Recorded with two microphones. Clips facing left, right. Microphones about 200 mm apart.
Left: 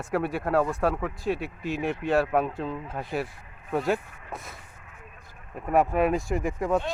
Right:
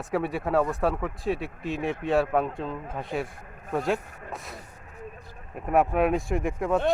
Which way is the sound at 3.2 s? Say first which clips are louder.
Right 4 dB; 50° right (ahead or behind).